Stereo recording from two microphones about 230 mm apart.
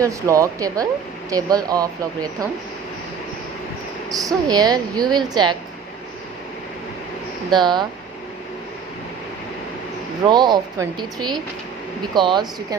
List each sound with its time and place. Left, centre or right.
0.0 s speech: centre
4.1 s speech: centre
7.5 s speech: centre
10.2 s speech: centre